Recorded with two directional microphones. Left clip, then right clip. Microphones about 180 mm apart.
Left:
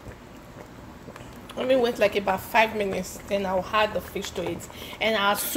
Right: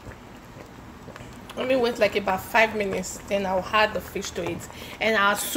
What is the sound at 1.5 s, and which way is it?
A woman's voice, centre (ahead or behind).